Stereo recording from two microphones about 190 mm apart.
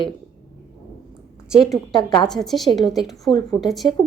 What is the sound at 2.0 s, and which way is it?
Speech, 20° left (ahead or behind).